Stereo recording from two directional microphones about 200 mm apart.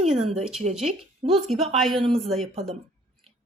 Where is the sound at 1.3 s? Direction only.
Centre (ahead or behind).